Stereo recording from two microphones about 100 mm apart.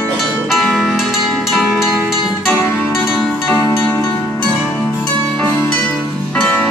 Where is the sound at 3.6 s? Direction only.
35° left (ahead or behind).